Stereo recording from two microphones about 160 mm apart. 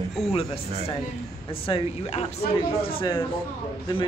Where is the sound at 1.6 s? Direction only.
40° left (ahead or behind).